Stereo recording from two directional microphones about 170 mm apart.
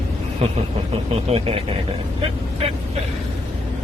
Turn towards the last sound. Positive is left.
turn(degrees=-35)  # may be behind; listen again after turning